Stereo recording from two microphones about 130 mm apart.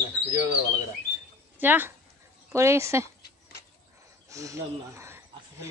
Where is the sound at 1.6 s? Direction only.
15° right (ahead or behind).